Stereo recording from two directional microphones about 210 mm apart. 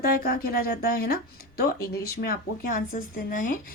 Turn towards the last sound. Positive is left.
turn(degrees=40)  # may be behind; listen again after turning